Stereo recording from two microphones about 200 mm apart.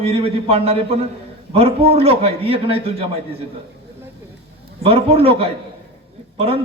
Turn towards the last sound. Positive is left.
turn(degrees=-30)  # may be behind; listen again after turning